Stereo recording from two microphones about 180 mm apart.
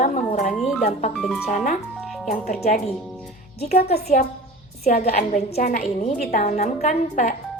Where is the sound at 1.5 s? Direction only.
45° left (ahead or behind).